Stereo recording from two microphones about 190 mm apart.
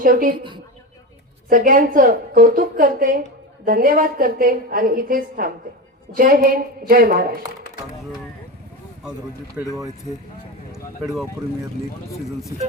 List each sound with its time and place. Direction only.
0.0 s a woman's voice: 45° right (ahead or behind)
0.3 s a woman's voice: 25° right (ahead or behind)
1.5 s a woman's voice: 45° right (ahead or behind)
9.6 s speech: 15° right (ahead or behind)
10.7 s speech: 5° right (ahead or behind)